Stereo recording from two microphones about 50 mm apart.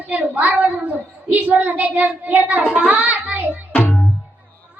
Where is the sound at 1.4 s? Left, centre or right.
Right.